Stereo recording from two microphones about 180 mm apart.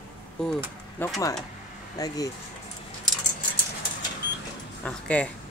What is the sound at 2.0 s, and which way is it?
Speech, 20° left (ahead or behind).